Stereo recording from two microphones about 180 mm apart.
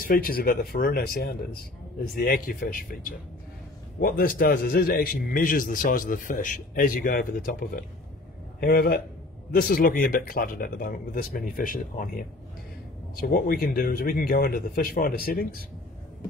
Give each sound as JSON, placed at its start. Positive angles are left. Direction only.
{"t": 0.0, "sound": "a man's voice", "side_deg": 55}